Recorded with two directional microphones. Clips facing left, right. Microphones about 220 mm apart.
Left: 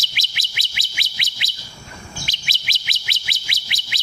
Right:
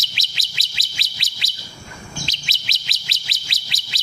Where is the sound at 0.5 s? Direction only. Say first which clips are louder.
Left 2 dB; 65° left (ahead or behind).